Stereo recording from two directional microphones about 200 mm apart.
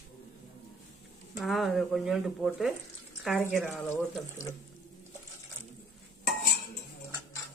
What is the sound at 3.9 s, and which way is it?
Speech, 15° left (ahead or behind).